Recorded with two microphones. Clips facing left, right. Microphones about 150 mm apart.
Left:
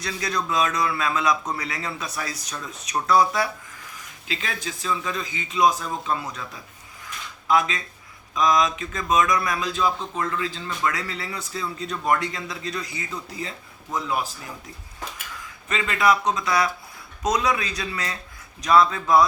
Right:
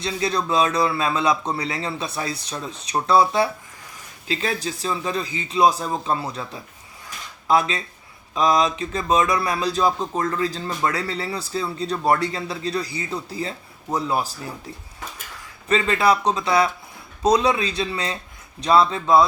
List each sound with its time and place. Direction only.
0.0 s a man's voice: 25° right (ahead or behind)
15.7 s a man's voice: 35° right (ahead or behind)